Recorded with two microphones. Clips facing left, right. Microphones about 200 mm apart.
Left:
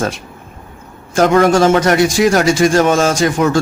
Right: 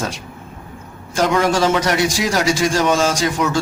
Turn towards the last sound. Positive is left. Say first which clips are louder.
# left 5 dB
turn(degrees=50)  # may be behind; listen again after turning